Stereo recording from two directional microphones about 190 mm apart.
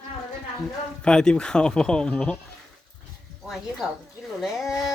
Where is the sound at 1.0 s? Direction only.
5° left (ahead or behind).